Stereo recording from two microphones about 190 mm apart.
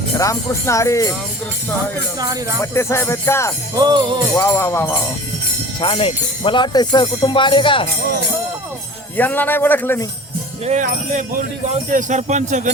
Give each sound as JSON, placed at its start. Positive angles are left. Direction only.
{"t": 0.2, "sound": "speech", "side_deg": 15}
{"t": 2.1, "sound": "speech", "side_deg": -20}
{"t": 2.6, "sound": "speech", "side_deg": 15}
{"t": 3.8, "sound": "speech", "side_deg": -20}
{"t": 4.4, "sound": "speech", "side_deg": 10}
{"t": 5.8, "sound": "speech", "side_deg": 25}
{"t": 9.1, "sound": "speech", "side_deg": 10}
{"t": 10.7, "sound": "speech", "side_deg": -40}